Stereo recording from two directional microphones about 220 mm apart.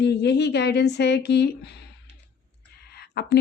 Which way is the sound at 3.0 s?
45° left (ahead or behind).